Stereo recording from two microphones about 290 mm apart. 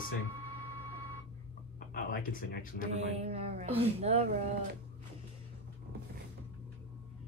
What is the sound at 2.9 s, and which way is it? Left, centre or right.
Speech, right.